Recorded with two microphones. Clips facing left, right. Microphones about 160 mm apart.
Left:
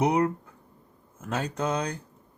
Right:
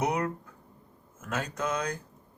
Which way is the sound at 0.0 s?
30° left (ahead or behind).